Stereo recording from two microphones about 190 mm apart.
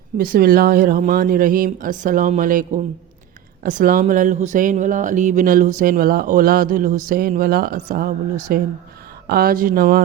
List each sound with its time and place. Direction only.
0.2 s speech: 50° right (ahead or behind)